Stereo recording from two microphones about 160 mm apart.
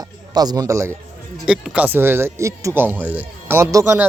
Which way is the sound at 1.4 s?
5° right (ahead or behind).